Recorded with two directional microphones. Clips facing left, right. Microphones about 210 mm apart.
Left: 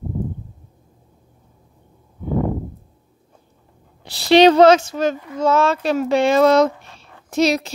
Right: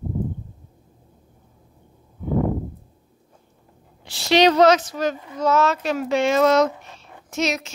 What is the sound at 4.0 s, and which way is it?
A woman's voice, 35° left (ahead or behind).